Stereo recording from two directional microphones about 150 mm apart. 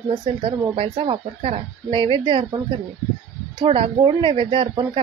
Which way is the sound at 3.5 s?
35° right (ahead or behind).